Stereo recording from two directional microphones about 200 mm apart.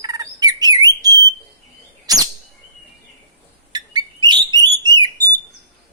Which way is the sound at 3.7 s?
20° right (ahead or behind).